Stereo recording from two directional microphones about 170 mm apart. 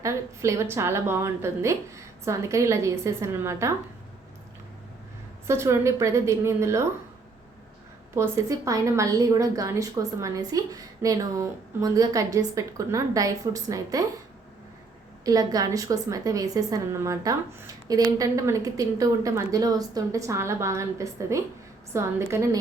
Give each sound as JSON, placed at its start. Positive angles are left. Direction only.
{"t": 0.0, "sound": "a woman's voice", "side_deg": -15}
{"t": 5.5, "sound": "a woman's voice", "side_deg": -15}
{"t": 8.1, "sound": "a woman's voice", "side_deg": -15}
{"t": 15.2, "sound": "a woman's voice", "side_deg": -20}